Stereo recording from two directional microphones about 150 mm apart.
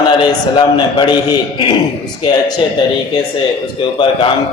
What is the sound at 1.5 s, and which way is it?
Speech, 30° left (ahead or behind).